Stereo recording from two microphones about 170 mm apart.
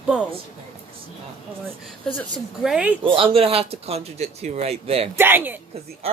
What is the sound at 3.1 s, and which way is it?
Speech, 30° right (ahead or behind).